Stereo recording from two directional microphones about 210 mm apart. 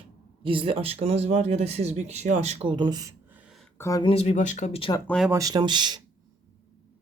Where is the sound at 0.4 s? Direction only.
25° right (ahead or behind); by 3.7 s 5° right (ahead or behind).